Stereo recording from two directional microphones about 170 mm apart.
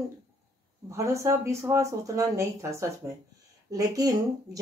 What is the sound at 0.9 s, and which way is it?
A woman's voice, 15° right (ahead or behind).